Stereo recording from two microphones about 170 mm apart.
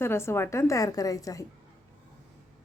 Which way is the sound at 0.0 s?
15° left (ahead or behind).